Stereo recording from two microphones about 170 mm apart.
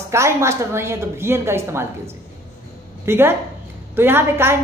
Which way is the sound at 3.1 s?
15° right (ahead or behind).